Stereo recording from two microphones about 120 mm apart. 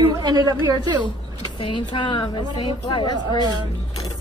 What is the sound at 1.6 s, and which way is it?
Speech, 40° left (ahead or behind).